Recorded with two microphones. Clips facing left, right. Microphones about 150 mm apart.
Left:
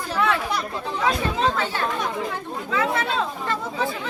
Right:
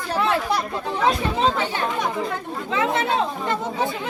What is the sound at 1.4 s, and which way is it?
Speech, 15° right (ahead or behind).